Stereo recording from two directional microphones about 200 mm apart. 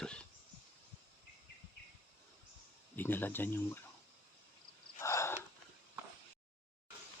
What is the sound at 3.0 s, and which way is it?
Speech, 10° left (ahead or behind).